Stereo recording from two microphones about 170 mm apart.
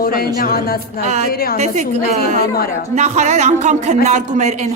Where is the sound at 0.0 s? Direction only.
60° left (ahead or behind).